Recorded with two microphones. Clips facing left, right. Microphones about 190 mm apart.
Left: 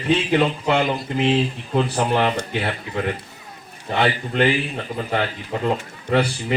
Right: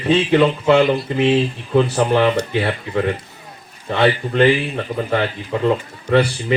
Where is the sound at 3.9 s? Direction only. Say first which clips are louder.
Right 4 dB; 55° right (ahead or behind).